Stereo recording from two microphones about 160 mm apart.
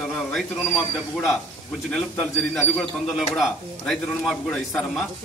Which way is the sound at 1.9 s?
5° left (ahead or behind).